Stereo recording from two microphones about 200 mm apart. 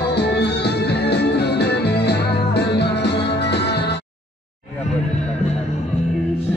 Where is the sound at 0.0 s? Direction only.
55° left (ahead or behind).